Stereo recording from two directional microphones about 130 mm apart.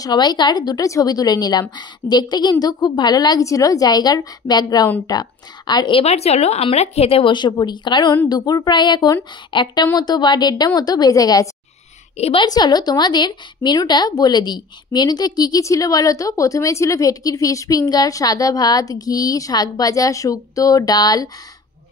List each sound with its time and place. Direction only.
0.0 s a woman's voice: 35° left (ahead or behind)
6.0 s a woman's voice: 55° left (ahead or behind); by 11.4 s 30° left (ahead or behind)
12.2 s a woman's voice: 50° left (ahead or behind)
12.4 s a woman's voice: 30° left (ahead or behind)